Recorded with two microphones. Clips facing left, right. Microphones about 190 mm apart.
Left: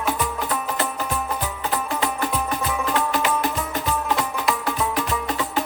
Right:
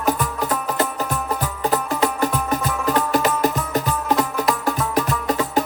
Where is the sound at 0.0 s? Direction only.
40° right (ahead or behind).